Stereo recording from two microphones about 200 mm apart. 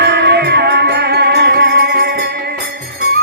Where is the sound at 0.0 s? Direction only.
55° right (ahead or behind).